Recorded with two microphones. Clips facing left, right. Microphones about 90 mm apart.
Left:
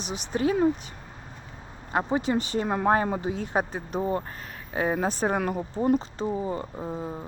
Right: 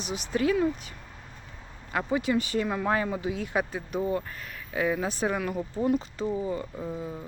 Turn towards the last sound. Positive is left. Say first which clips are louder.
# left 2 dB
turn(degrees=30)  # may be behind; listen again after turning